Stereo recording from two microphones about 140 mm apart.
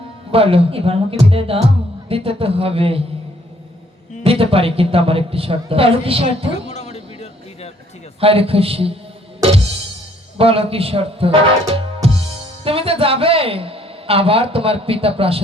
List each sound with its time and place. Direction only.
0.3 s a man's voice: 40° right (ahead or behind)
4.2 s a man's voice: 45° right (ahead or behind)
6.7 s music: 55° left (ahead or behind)
8.2 s a man's voice: 45° right (ahead or behind)
10.3 s a man's voice: 45° right (ahead or behind)